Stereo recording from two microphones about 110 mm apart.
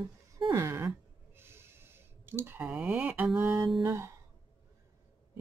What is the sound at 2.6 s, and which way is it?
Speech, 10° right (ahead or behind).